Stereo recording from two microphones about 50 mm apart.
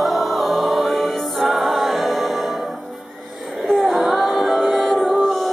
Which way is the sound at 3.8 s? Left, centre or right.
Centre.